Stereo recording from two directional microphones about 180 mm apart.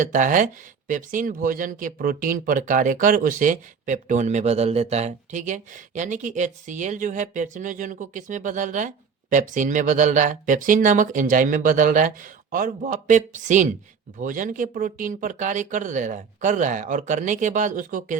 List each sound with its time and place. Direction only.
0.0 s speech: 45° right (ahead or behind)